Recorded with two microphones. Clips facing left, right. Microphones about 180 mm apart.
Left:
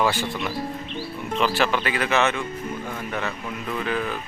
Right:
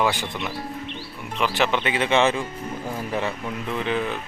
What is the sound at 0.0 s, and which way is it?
Speech, 15° right (ahead or behind).